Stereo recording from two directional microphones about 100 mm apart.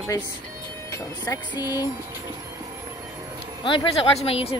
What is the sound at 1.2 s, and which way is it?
Music, 40° left (ahead or behind).